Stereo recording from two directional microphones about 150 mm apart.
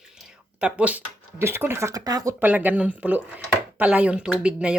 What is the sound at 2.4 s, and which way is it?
Speech, 10° right (ahead or behind).